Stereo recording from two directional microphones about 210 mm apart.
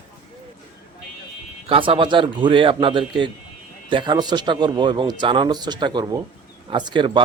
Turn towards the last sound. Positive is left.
turn(degrees=-20)  # may be behind; listen again after turning